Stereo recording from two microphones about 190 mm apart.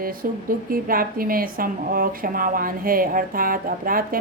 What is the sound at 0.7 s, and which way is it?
A woman's voice, 50° right (ahead or behind).